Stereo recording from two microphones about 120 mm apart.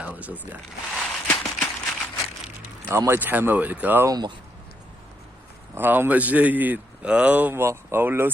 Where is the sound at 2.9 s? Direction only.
20° right (ahead or behind).